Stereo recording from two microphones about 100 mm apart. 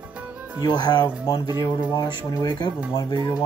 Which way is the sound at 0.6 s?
45° left (ahead or behind).